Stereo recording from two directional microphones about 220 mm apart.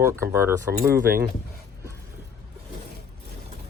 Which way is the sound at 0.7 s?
45° right (ahead or behind).